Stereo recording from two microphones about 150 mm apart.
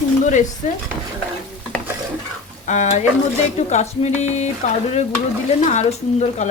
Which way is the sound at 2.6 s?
50° left (ahead or behind).